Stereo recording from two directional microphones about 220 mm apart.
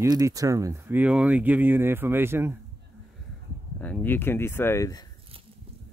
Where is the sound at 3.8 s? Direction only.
10° left (ahead or behind).